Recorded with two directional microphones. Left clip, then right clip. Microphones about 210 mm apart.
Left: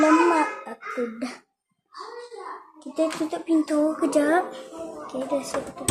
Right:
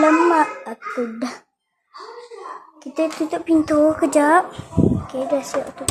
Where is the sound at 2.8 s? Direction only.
15° right (ahead or behind).